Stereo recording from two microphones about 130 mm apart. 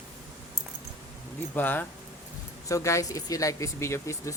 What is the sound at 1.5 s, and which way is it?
Speech, 15° left (ahead or behind).